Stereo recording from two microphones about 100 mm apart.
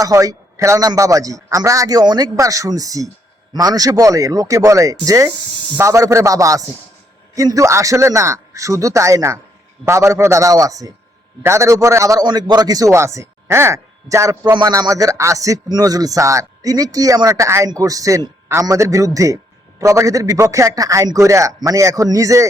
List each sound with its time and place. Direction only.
0.0 s a man's voice: 35° right (ahead or behind)
12.2 s a man's voice: 45° right (ahead or behind)